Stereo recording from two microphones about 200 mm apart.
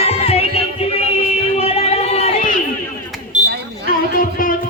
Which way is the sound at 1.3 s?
30° left (ahead or behind).